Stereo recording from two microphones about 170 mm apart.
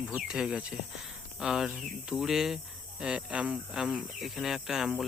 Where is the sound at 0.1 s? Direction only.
5° right (ahead or behind).